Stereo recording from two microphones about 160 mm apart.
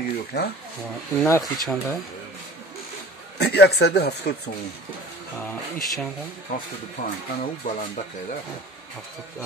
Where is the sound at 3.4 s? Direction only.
90° left.